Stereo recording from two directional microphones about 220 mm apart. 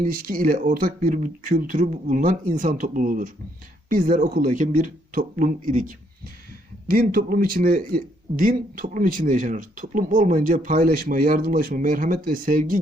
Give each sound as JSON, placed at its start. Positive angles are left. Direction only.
{"t": 0.0, "sound": "a man's voice", "side_deg": -40}
{"t": 6.9, "sound": "a man's voice", "side_deg": -40}